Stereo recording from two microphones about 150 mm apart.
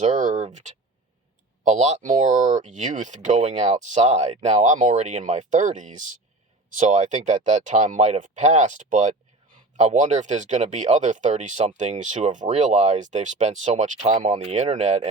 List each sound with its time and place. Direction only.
0.0 s speech: 55° right (ahead or behind)